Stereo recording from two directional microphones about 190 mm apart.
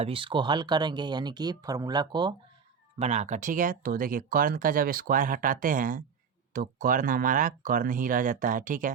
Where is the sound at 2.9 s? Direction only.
35° right (ahead or behind).